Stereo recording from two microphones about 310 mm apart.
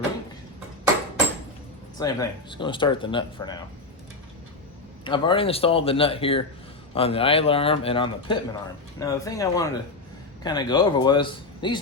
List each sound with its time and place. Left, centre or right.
2.0 s a man's voice: centre
5.0 s a man's voice: centre